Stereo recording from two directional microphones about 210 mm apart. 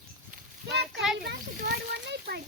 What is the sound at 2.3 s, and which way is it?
Speech, 45° right (ahead or behind).